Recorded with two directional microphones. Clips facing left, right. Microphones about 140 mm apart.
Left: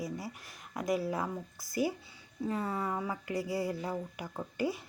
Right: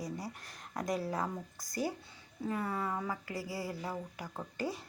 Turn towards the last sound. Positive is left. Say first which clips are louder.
# left 4 dB
turn(degrees=10)  # may be behind; listen again after turning